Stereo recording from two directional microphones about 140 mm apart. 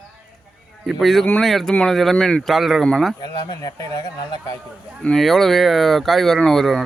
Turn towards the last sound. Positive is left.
turn(degrees=0)  # may be behind; listen again after turning